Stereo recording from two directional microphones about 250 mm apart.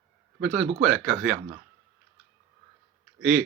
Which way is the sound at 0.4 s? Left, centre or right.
Centre.